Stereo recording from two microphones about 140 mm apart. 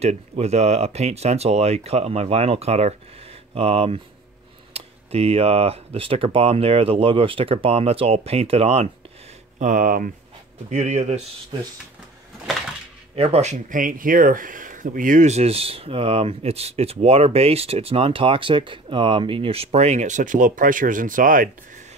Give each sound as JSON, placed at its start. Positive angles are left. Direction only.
{"t": 0.0, "sound": "speech", "side_deg": -50}
{"t": 9.6, "sound": "speech", "side_deg": -70}
{"t": 10.7, "sound": "speech", "side_deg": -60}
{"t": 11.5, "sound": "speech", "side_deg": -35}
{"t": 13.1, "sound": "speech", "side_deg": -45}